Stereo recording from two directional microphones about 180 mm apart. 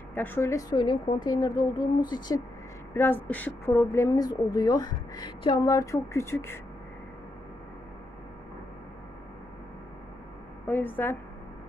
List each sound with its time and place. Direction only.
0.1 s a woman's voice: 10° left (ahead or behind)
2.9 s a woman's voice: 10° left (ahead or behind)
10.7 s a woman's voice: 10° left (ahead or behind)